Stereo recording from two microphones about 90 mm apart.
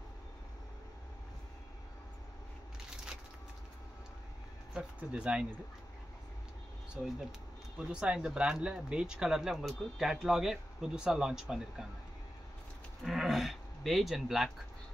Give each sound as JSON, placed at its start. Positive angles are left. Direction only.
{"t": 4.7, "sound": "speech", "side_deg": -10}
{"t": 7.0, "sound": "speech", "side_deg": -15}
{"t": 13.0, "sound": "speech", "side_deg": 0}